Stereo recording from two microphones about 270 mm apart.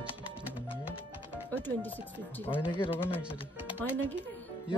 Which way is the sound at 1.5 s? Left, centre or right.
Centre.